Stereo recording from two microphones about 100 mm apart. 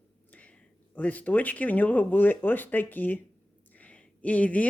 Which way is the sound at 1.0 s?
15° left (ahead or behind).